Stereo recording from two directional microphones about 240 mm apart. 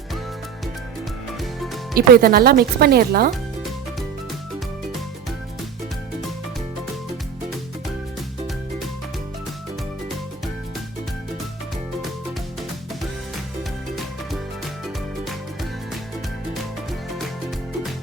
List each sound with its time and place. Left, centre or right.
2.0 s speech: right